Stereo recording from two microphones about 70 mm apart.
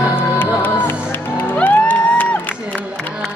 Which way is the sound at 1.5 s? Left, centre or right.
Left.